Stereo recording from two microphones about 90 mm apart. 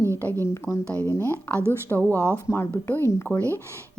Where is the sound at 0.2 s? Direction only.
25° left (ahead or behind).